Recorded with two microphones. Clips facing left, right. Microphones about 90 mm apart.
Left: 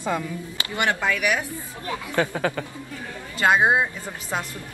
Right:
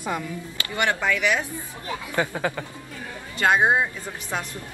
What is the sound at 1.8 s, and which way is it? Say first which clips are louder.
Speech: left 2 dB; 20° right (ahead or behind).